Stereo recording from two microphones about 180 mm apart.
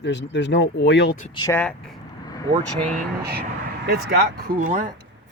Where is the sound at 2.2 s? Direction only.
20° left (ahead or behind).